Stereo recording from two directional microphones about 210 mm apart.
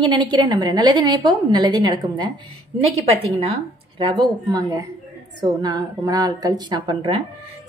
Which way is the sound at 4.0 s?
20° right (ahead or behind).